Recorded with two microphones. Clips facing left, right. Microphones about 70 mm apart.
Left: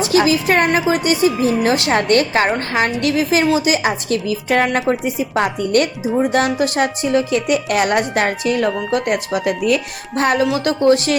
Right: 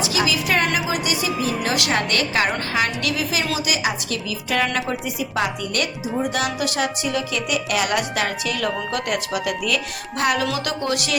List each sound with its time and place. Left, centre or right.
0.0 s a woman's voice: left